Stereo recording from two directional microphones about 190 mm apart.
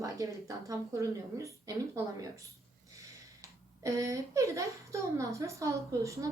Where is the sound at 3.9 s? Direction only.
15° right (ahead or behind).